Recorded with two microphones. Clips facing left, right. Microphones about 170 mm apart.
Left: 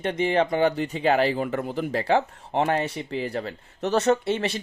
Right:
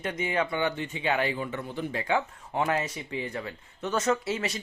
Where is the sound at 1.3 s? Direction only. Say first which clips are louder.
Left 7 dB; 50° left (ahead or behind).